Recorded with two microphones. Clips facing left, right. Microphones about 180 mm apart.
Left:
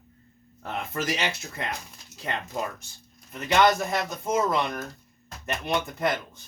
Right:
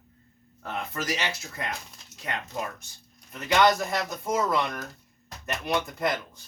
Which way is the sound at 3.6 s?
20° left (ahead or behind).